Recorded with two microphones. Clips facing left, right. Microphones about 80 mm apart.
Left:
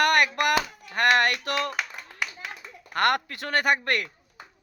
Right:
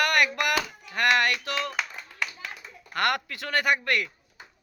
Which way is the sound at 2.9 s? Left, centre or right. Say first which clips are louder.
Left 3 dB; left.